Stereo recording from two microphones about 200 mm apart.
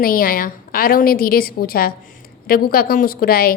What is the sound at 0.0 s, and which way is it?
A woman's voice, 45° left (ahead or behind).